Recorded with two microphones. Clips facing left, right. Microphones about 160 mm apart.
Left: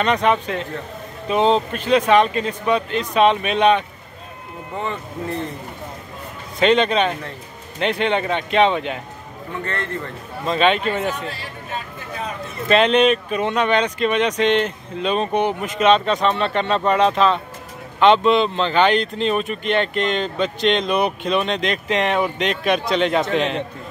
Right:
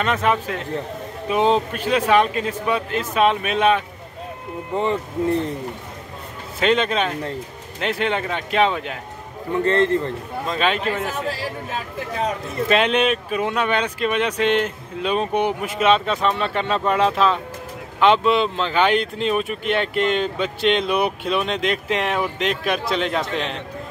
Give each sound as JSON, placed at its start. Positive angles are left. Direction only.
{"t": 0.0, "sound": "speech", "side_deg": -5}
{"t": 6.6, "sound": "speech", "side_deg": -5}
{"t": 9.7, "sound": "a man's voice", "side_deg": -30}
{"t": 10.5, "sound": "speech", "side_deg": -5}
{"t": 11.2, "sound": "speech", "side_deg": -90}
{"t": 12.6, "sound": "speech", "side_deg": -10}